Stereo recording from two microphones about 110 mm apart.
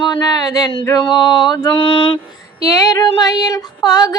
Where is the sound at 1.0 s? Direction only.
45° left (ahead or behind).